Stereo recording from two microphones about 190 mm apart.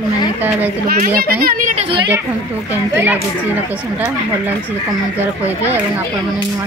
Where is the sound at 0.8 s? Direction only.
50° right (ahead or behind).